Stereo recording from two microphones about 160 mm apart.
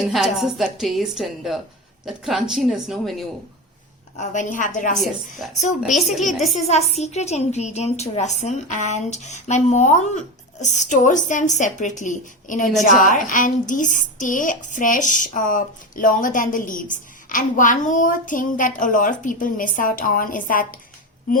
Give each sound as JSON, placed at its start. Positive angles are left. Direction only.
{"t": 0.1, "sound": "a woman's voice", "side_deg": 0}
{"t": 4.2, "sound": "a woman's voice", "side_deg": 50}
{"t": 5.8, "sound": "a woman's voice", "side_deg": 0}
{"t": 6.5, "sound": "a woman's voice", "side_deg": 45}